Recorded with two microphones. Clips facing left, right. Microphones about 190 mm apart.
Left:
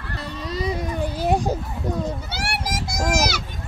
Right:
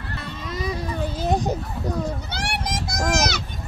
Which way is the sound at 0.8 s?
15° left (ahead or behind).